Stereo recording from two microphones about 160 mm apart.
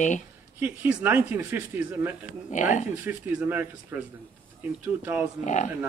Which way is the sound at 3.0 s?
10° right (ahead or behind).